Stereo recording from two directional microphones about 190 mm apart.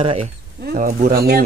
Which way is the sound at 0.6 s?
50° right (ahead or behind).